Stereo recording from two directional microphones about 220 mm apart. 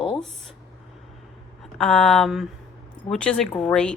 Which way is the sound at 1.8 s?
Centre (ahead or behind).